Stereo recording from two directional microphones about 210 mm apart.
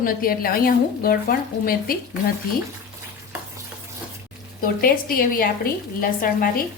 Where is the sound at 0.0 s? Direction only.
45° left (ahead or behind).